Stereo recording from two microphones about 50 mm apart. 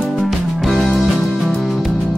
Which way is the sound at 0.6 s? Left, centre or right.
Centre.